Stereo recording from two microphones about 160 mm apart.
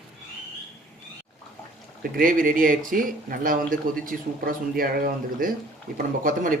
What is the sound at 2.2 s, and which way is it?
Speech, 60° right (ahead or behind).